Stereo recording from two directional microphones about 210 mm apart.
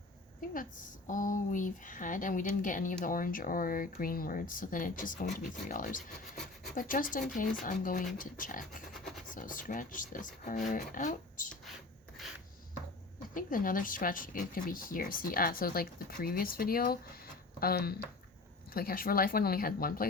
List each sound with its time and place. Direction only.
0.5 s speech: 40° left (ahead or behind)
8.9 s a sound: centre (ahead or behind)
9.3 s speech: 40° left (ahead or behind)
13.3 s speech: 40° left (ahead or behind)